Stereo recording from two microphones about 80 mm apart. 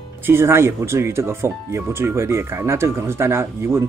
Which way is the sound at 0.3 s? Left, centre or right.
Right.